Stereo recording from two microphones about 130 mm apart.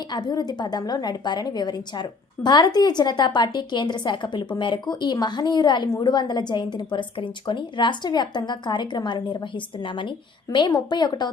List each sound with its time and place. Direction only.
0.1 s a woman's voice: 30° left (ahead or behind)